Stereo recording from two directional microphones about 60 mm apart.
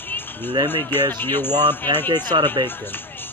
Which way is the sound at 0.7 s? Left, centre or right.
Left.